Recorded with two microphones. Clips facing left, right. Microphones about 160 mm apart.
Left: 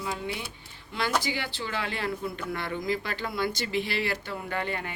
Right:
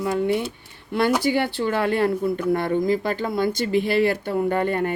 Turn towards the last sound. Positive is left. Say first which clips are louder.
# right 11 dB
turn(degrees=-50)  # may be behind; listen again after turning